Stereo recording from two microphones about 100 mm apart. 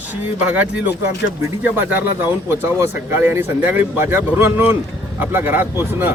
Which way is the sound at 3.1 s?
20° right (ahead or behind).